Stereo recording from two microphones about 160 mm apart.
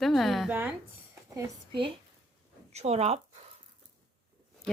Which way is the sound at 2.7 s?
40° right (ahead or behind).